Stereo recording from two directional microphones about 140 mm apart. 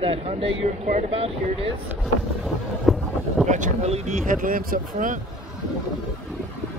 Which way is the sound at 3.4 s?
60° right (ahead or behind).